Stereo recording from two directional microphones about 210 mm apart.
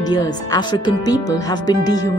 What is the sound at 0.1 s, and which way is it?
Speech, 20° left (ahead or behind).